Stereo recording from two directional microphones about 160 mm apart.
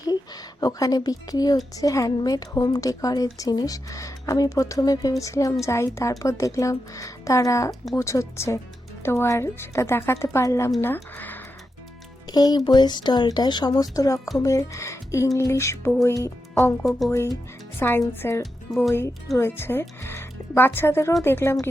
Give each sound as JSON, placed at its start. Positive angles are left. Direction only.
{"t": 0.6, "sound": "speech", "side_deg": 25}
{"t": 12.3, "sound": "speech", "side_deg": 25}